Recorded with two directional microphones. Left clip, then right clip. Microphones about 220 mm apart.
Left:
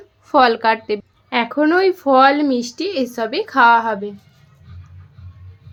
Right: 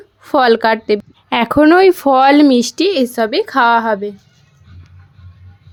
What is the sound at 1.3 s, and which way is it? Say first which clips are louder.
Speech: right 6 dB; 50° right (ahead or behind).